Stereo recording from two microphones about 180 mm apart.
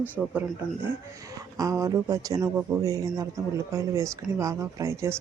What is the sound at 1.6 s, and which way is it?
Speech, 20° right (ahead or behind).